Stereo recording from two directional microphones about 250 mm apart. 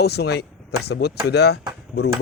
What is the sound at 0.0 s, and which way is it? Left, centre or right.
Speech, left.